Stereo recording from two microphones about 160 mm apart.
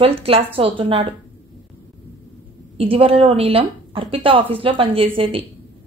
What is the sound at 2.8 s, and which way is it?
A woman's voice, 35° right (ahead or behind).